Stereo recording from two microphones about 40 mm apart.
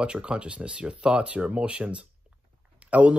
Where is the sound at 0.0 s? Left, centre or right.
Right.